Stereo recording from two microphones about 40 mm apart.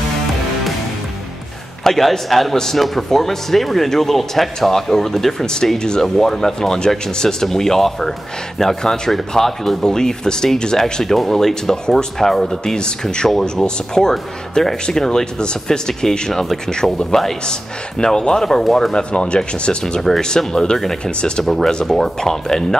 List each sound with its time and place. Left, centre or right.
1.9 s a man's voice: centre
2.5 s speech: centre
12.7 s speech: centre
13.3 s speech: centre
19.1 s speech: left
20.0 s speech: centre
20.7 s speech: centre
21.0 s speech: left
21.5 s speech: centre